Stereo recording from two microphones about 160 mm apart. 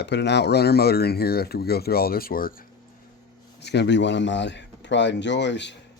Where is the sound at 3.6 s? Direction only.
90° left.